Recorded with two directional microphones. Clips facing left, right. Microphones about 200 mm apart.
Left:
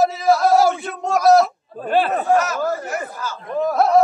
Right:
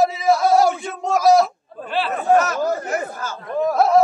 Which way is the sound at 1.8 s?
50° left (ahead or behind).